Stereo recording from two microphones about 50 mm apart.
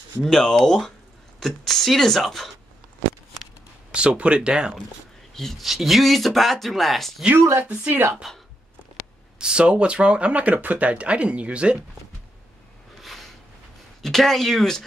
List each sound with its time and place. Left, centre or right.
0.2 s speech: centre
3.9 s speech: right
5.3 s speech: centre
7.6 s speech: right
8.2 s speech: centre
9.4 s speech: centre
13.0 s a sound: centre
14.0 s speech: centre